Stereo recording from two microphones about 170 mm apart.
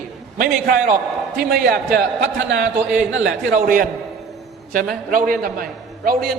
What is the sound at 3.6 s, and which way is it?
Speech, 55° right (ahead or behind).